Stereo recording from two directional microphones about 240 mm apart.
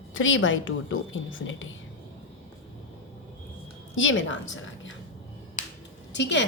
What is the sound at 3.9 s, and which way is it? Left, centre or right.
Speech, left.